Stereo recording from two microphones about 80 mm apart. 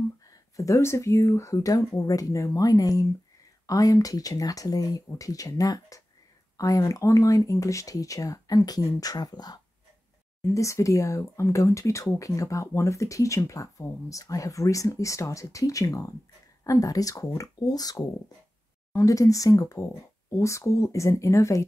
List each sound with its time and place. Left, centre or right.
0.3 s speech: left
10.4 s speech: left
18.9 s speech: left